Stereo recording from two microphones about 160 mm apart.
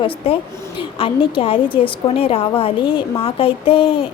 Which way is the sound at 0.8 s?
35° left (ahead or behind).